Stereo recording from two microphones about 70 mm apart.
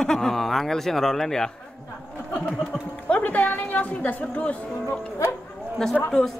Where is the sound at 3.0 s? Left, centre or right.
Centre.